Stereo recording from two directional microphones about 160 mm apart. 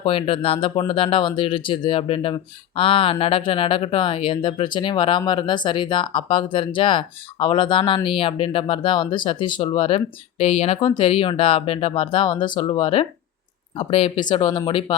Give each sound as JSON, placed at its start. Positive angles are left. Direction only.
{"t": 0.0, "sound": "speech", "side_deg": 35}